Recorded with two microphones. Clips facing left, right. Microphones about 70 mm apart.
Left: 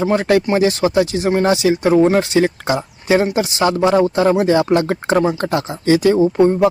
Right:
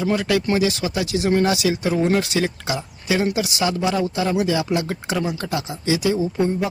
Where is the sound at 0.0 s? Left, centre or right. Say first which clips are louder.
Left 6 dB; left.